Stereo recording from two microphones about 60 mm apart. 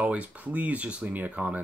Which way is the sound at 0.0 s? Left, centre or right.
Right.